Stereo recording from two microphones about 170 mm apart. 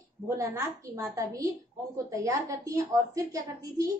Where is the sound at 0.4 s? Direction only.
15° right (ahead or behind).